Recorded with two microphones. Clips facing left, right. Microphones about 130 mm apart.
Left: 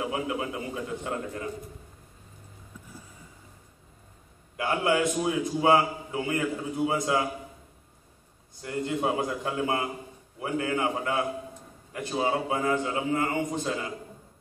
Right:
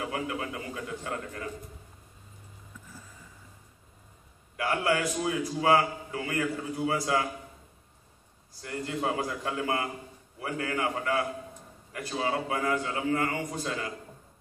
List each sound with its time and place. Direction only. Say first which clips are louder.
0.0 s a man's voice: left 3 dB; 20° left (ahead or behind)
4.6 s a man's voice: left 2 dB; 20° left (ahead or behind)
8.6 s a man's voice: left 3 dB; 20° left (ahead or behind)